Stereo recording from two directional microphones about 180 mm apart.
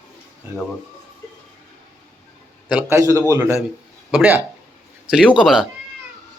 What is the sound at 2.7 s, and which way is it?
A man's voice, 10° right (ahead or behind).